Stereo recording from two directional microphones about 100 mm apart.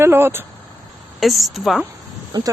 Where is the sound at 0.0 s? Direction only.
25° right (ahead or behind).